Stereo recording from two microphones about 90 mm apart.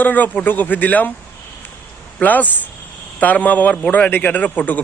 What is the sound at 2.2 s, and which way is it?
A man's voice, 20° left (ahead or behind).